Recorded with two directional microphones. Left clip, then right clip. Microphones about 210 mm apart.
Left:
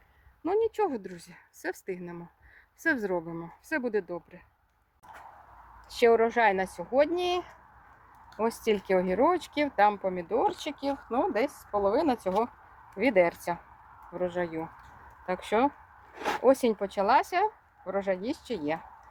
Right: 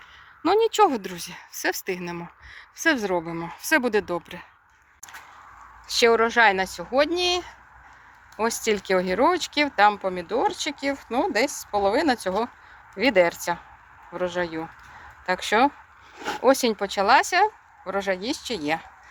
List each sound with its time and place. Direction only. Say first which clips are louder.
0.4 s a woman's voice: right 8 dB; centre (ahead or behind)
5.9 s speech: right 4 dB; centre (ahead or behind)